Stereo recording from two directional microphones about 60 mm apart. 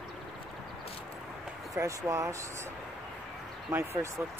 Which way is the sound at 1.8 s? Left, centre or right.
Right.